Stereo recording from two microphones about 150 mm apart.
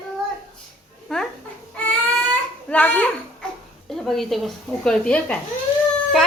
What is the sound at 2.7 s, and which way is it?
Speech, 10° left (ahead or behind).